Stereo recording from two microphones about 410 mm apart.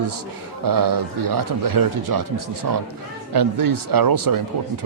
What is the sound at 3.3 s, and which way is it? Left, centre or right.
Speech, right.